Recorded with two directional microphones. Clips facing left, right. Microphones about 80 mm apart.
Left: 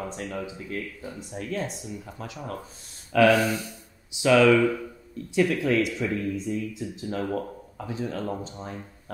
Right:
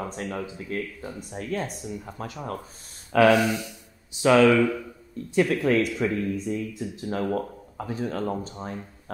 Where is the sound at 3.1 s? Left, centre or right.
Right.